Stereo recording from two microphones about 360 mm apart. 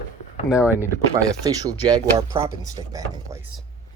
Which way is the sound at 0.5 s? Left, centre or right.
Centre.